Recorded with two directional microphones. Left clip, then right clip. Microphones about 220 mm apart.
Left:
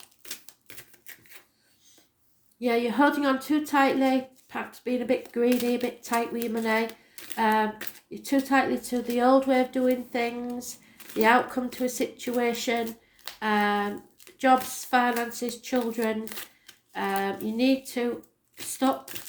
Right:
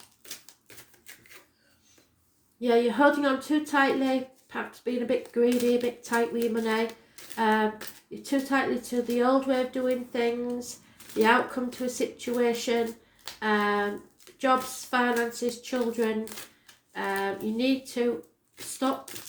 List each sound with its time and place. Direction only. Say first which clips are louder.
0.2 s typewriter: left 2 dB; 25° left (ahead or behind)
2.6 s speech: right 1 dB; 35° left (ahead or behind)
18.6 s shuffling cards: left 3 dB; 20° left (ahead or behind)